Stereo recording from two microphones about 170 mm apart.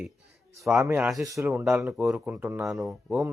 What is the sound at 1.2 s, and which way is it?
Speech, 15° right (ahead or behind).